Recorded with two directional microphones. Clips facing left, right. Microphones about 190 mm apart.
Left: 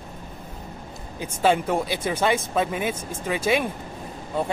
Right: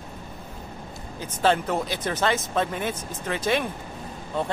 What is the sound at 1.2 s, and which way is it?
Speech, 10° left (ahead or behind).